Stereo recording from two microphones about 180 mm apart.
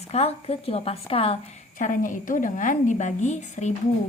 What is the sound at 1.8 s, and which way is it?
A woman's voice, 45° left (ahead or behind).